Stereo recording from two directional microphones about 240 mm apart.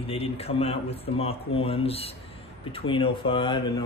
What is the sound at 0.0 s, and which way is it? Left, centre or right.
A man's voice, left.